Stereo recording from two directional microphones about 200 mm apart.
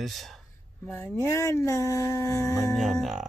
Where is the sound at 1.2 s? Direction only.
15° left (ahead or behind).